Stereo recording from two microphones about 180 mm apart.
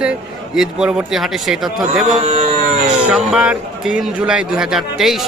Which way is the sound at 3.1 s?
Centre (ahead or behind).